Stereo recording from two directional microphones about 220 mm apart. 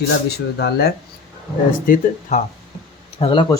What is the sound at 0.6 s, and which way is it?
Speech, 45° left (ahead or behind).